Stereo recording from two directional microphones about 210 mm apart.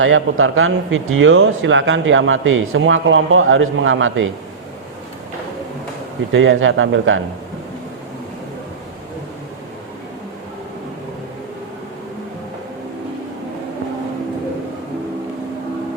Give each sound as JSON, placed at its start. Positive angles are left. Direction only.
{"t": 0.0, "sound": "a man's voice", "side_deg": -70}
{"t": 6.3, "sound": "a man's voice", "side_deg": -65}